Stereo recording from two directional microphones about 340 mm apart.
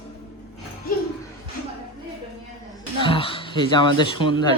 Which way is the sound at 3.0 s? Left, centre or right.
Centre.